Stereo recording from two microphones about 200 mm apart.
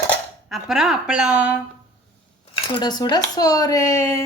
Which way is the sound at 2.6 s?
25° left (ahead or behind).